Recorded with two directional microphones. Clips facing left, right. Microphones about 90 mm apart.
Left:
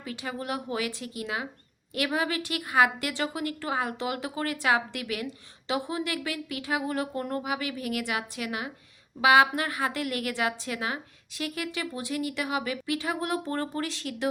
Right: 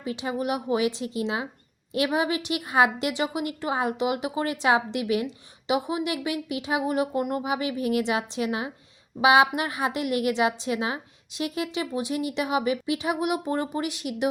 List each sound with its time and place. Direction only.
0.0 s a woman's voice: 20° right (ahead or behind)